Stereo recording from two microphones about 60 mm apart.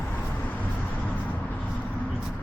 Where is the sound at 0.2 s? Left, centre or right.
Left.